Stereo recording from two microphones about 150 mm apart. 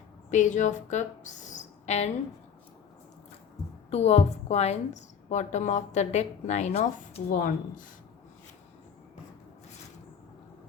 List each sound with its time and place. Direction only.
0.3 s speech: 55° left (ahead or behind)
3.9 s a woman's voice: 45° left (ahead or behind); by 7.9 s 60° left (ahead or behind)